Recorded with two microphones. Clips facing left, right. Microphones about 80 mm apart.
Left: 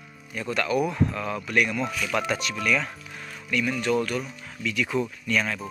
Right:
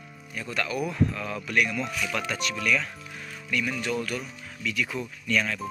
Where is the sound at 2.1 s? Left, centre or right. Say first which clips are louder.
Left 5 dB; left.